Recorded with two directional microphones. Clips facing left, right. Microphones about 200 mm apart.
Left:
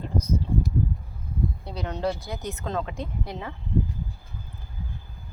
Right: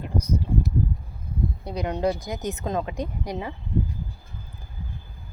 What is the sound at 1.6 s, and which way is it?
Speech, 15° right (ahead or behind).